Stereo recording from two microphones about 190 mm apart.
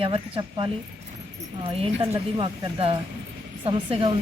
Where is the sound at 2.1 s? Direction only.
25° right (ahead or behind).